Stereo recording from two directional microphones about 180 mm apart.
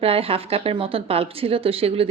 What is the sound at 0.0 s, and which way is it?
Speech, 30° right (ahead or behind).